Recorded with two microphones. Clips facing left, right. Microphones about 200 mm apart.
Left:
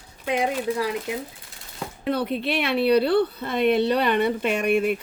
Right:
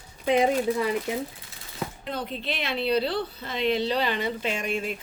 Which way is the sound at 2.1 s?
65° left (ahead or behind).